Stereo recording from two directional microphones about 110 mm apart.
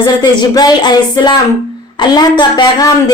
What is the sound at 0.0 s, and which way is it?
A woman's voice, 40° left (ahead or behind).